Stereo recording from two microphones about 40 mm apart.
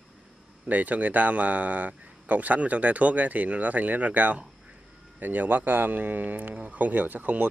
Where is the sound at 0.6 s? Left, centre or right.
Right.